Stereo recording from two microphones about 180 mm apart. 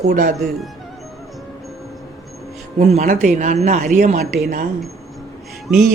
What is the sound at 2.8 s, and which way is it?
Speech, 40° right (ahead or behind).